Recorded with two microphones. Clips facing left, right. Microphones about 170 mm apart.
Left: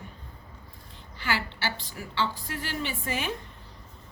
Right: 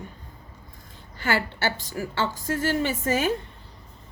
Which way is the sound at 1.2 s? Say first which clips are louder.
Right 5 dB; 50° right (ahead or behind).